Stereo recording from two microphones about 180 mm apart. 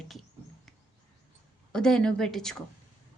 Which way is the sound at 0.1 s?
Centre (ahead or behind).